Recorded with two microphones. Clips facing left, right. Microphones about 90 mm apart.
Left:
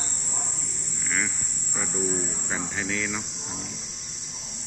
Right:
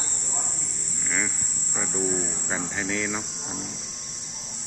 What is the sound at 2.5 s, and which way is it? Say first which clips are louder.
Cricket: right 1 dB; 25° right (ahead or behind).